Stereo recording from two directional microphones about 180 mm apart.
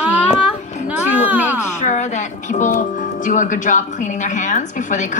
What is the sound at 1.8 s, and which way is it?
Speech, 40° left (ahead or behind).